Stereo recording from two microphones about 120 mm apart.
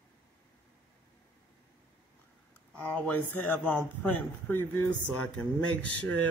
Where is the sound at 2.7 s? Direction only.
15° left (ahead or behind).